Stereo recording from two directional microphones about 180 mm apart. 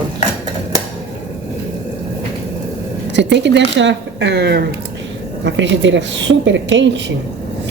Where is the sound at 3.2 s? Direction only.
80° right.